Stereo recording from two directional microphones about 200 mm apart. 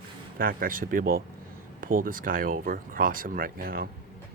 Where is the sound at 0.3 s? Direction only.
45° right (ahead or behind).